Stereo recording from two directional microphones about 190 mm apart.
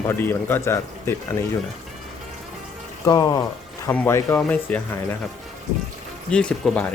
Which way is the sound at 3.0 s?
20° left (ahead or behind).